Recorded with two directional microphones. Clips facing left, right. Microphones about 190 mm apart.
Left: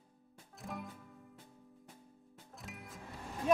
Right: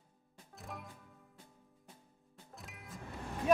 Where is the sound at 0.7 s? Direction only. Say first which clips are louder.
Left 4 dB; centre (ahead or behind).